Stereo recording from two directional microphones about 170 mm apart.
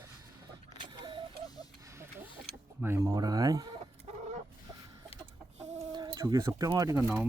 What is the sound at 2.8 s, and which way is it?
Speech, 15° right (ahead or behind).